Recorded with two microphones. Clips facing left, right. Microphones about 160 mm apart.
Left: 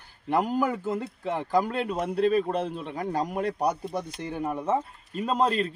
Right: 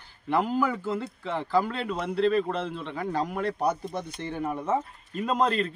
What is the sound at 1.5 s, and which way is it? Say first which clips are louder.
A man's voice: left 1 dB; 45° left (ahead or behind).